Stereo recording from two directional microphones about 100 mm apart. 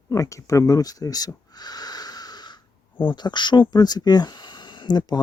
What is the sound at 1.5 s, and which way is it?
Wheeze, 40° left (ahead or behind).